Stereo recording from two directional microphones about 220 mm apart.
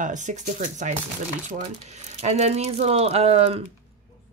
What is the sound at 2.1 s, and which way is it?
Speech, 30° right (ahead or behind).